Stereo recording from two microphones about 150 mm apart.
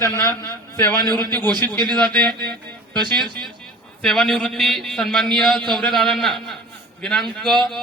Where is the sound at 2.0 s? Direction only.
5° left (ahead or behind).